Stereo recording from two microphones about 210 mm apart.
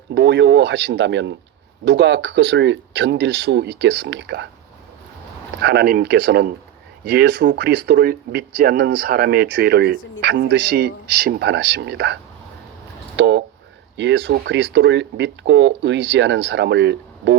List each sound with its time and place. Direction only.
0.1 s speech: 55° right (ahead or behind)
5.6 s speech: 50° right (ahead or behind)